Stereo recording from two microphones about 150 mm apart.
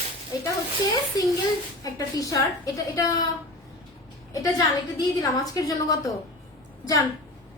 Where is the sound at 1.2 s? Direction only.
25° left (ahead or behind).